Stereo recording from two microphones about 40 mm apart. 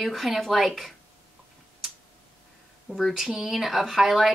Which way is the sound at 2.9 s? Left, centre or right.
Centre.